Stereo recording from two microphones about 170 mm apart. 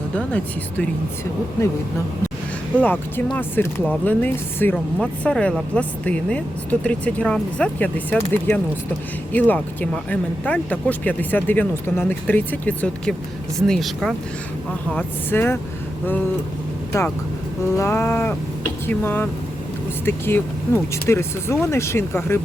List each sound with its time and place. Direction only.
0.2 s speech: 10° left (ahead or behind)
2.8 s speech: 10° left (ahead or behind)
14.8 s speech: 10° left (ahead or behind)
16.9 s speech: 15° left (ahead or behind)